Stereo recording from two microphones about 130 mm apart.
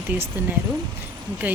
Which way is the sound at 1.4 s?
10° right (ahead or behind).